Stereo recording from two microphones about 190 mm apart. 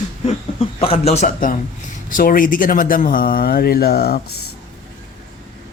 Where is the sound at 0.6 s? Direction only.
30° left (ahead or behind); by 4.2 s 55° left (ahead or behind).